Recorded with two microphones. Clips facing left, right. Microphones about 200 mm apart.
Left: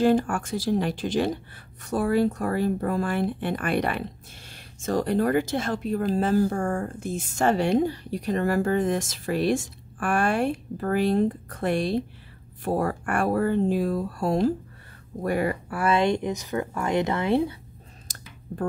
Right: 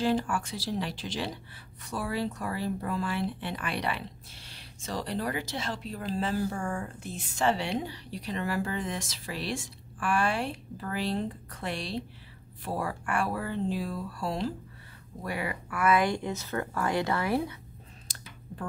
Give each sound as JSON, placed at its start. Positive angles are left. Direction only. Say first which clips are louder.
{"t": 0.0, "sound": "speech", "louder": "left 7 dB", "side_deg": 50}
{"t": 15.7, "sound": "speech", "louder": "left 2 dB", "side_deg": 30}
{"t": 18.1, "sound": "a sound", "louder": "left 3 dB", "side_deg": 45}